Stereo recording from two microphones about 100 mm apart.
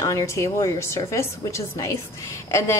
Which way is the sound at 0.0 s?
30° left (ahead or behind).